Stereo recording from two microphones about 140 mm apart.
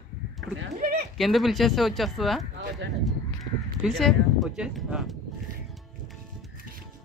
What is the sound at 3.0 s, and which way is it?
Crow, centre (ahead or behind).